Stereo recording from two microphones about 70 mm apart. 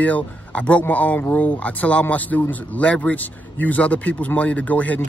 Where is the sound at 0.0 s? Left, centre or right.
Centre.